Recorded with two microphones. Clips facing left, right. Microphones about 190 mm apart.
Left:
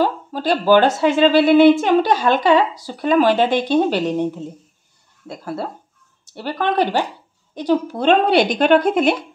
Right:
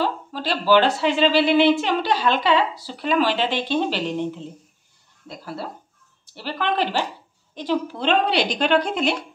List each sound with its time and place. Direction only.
0.0 s a woman's voice: 45° left (ahead or behind)
5.3 s a woman's voice: 55° left (ahead or behind)